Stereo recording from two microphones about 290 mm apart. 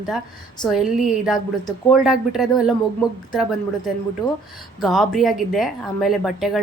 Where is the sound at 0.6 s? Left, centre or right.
Centre.